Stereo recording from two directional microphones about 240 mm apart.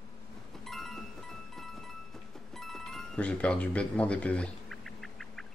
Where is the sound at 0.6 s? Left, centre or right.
Centre.